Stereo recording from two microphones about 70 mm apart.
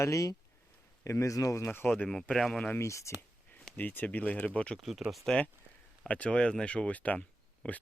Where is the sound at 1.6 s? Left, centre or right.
Left.